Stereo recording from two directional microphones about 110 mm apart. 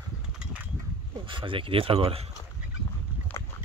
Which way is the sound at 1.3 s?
50° right (ahead or behind).